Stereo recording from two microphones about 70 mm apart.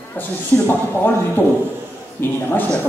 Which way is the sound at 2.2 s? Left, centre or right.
Left.